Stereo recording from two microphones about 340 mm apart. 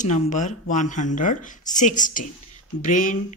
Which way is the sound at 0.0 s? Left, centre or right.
Left.